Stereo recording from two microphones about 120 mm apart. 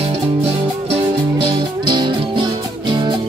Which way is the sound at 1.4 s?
40° right (ahead or behind).